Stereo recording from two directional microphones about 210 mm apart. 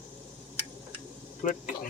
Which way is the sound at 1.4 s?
40° left (ahead or behind).